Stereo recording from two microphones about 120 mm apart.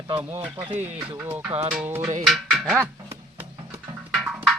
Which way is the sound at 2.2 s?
Centre (ahead or behind).